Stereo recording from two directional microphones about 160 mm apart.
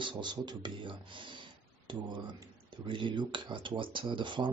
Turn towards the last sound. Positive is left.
turn(degrees=-30)  # may be behind; listen again after turning